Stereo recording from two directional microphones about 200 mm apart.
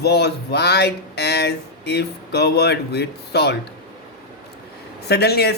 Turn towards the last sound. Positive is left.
turn(degrees=55)  # may be behind; listen again after turning